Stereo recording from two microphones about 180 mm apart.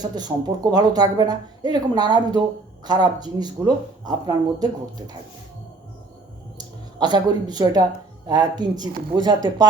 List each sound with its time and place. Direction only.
0.0 s speech: 20° right (ahead or behind)
6.6 s speech: 25° right (ahead or behind)